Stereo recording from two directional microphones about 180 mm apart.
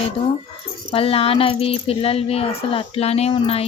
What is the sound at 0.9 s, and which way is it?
Speech, 30° left (ahead or behind).